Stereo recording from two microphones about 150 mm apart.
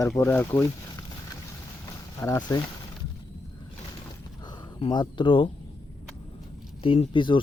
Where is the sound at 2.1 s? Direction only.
20° left (ahead or behind).